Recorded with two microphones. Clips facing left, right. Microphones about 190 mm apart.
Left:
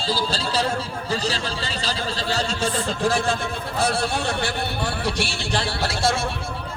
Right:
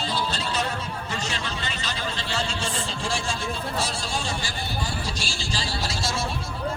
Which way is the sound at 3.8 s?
60° left (ahead or behind).